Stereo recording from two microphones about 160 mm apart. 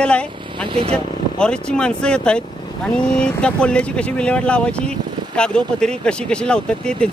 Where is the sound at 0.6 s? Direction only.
30° right (ahead or behind).